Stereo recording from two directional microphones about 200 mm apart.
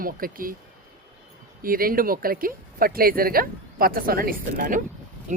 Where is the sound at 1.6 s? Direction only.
45° right (ahead or behind).